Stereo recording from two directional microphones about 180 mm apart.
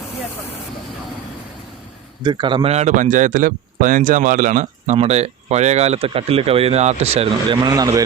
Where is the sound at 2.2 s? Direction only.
25° right (ahead or behind).